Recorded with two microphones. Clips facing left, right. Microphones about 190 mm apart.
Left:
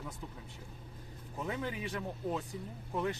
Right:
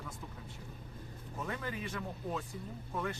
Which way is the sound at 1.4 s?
20° left (ahead or behind).